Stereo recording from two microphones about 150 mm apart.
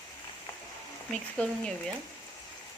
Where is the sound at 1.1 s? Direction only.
5° left (ahead or behind).